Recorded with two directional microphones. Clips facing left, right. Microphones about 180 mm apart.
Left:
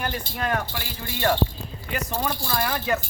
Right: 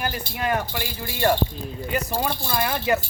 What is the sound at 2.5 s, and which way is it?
Speech, 5° right (ahead or behind).